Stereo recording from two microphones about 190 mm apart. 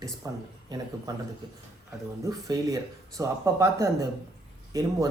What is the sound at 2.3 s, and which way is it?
Speech, 20° right (ahead or behind).